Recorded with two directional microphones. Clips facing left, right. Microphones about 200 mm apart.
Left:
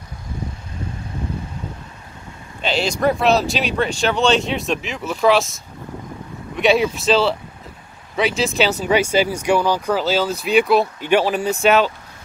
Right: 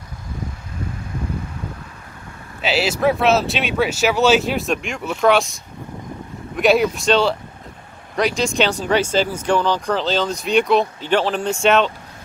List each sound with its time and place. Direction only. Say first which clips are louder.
2.6 s speech: right 1 dB; 5° right (ahead or behind)